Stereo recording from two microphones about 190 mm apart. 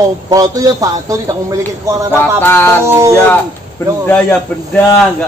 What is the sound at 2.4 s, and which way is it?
Speech, 10° left (ahead or behind).